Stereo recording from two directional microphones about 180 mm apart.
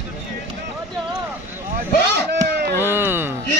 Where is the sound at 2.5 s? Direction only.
65° right (ahead or behind).